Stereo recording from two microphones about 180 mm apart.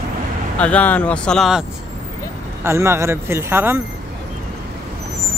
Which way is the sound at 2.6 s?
15° right (ahead or behind).